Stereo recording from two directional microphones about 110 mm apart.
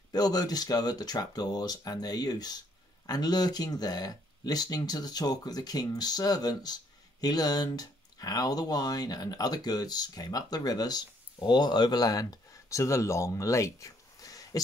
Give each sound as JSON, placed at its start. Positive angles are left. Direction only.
{"t": 0.1, "sound": "speech", "side_deg": 35}